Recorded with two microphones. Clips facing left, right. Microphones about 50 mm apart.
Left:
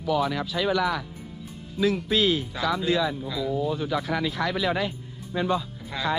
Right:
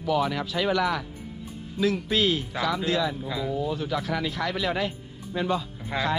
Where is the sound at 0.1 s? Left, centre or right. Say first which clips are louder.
Even; right.